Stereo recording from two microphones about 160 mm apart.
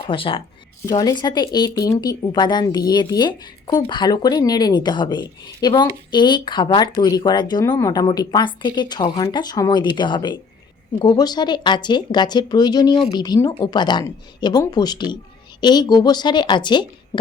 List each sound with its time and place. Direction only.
0.0 s speech: 35° left (ahead or behind)